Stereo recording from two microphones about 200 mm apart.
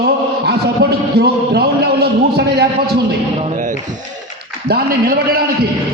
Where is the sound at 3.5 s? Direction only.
40° right (ahead or behind).